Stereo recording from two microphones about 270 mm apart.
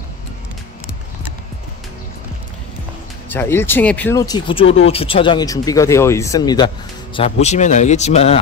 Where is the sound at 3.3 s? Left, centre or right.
Centre.